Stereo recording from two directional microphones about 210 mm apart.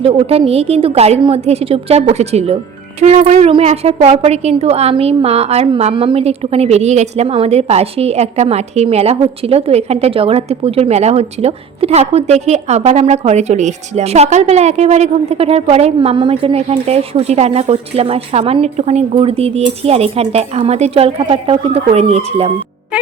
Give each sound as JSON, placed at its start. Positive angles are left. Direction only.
{"t": 0.0, "sound": "a woman's voice", "side_deg": -30}